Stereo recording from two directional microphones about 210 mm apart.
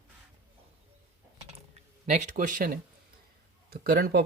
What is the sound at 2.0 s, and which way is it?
Speech, 35° right (ahead or behind).